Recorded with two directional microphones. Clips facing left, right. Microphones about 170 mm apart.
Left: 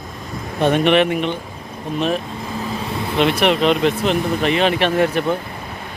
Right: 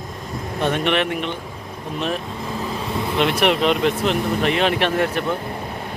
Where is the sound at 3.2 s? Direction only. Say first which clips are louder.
Left 3 dB; 5° right (ahead or behind).